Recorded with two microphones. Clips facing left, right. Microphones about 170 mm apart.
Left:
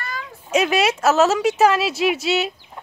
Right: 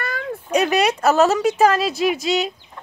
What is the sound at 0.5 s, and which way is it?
Speech, centre (ahead or behind).